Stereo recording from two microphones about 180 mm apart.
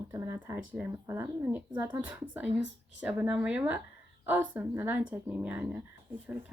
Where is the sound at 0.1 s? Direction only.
15° right (ahead or behind).